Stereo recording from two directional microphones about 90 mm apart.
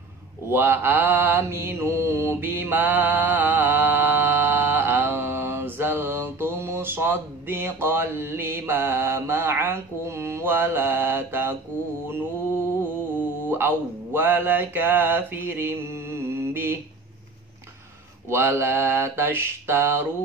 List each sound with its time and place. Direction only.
0.5 s mantra: 25° right (ahead or behind)
13.5 s mantra: 25° right (ahead or behind)
18.3 s mantra: 25° right (ahead or behind)